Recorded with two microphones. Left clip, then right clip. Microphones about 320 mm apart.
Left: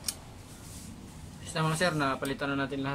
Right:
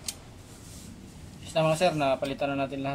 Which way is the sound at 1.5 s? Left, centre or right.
Left.